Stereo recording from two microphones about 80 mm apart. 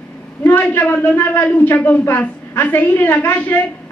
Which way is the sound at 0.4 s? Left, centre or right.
Left.